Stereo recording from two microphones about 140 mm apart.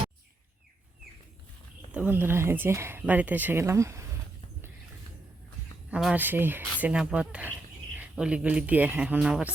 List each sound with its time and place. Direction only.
1.9 s speech: 10° right (ahead or behind)
5.9 s speech: 5° right (ahead or behind)